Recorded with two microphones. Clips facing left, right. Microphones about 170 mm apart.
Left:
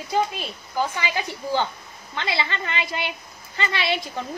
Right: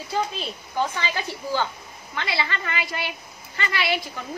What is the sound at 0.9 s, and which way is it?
A woman's voice, 15° left (ahead or behind).